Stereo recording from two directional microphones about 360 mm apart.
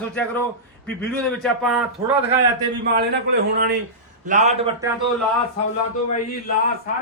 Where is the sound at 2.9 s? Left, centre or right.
Right.